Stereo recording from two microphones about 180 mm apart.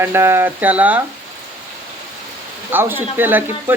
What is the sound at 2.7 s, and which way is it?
Speech, 10° right (ahead or behind).